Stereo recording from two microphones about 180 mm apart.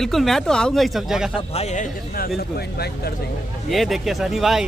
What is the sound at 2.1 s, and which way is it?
Speech, 60° left (ahead or behind).